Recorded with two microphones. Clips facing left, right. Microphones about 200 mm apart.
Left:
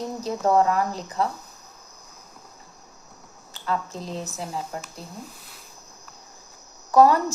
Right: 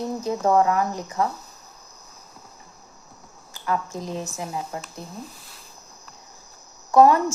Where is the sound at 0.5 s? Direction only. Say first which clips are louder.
Even; 35° left (ahead or behind).